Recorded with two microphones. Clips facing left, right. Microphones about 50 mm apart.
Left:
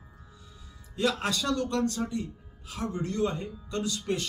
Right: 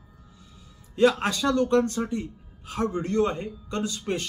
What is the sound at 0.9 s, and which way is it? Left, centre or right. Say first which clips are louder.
Speech: right 7 dB; right.